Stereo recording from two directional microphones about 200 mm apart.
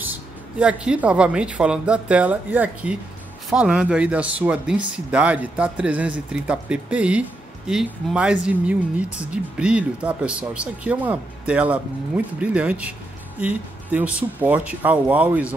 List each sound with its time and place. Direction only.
0.0 s speech: 10° right (ahead or behind)